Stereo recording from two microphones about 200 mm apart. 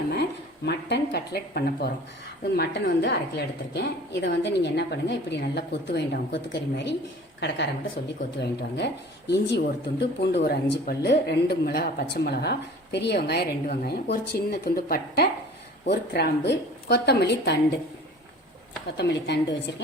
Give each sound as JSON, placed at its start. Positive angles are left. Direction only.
{"t": 0.1, "sound": "a woman's voice", "side_deg": 55}
{"t": 18.9, "sound": "a woman's voice", "side_deg": 60}